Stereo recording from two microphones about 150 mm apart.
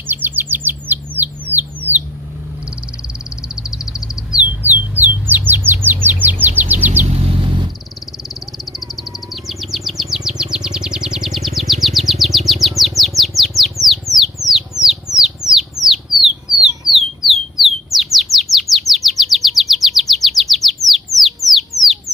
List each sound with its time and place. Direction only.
0.0 s bird: 15° right (ahead or behind)
3.6 s bird: 5° right (ahead or behind)
6.4 s chirp: 10° right (ahead or behind)
7.4 s vehicle: 30° right (ahead or behind)
9.3 s chirp: centre (ahead or behind)
16.9 s a sound: centre (ahead or behind)
17.9 s chirp: centre (ahead or behind)
21.5 s a sound: centre (ahead or behind)